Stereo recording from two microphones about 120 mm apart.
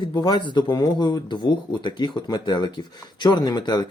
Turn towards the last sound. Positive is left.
turn(degrees=35)  # may be behind; listen again after turning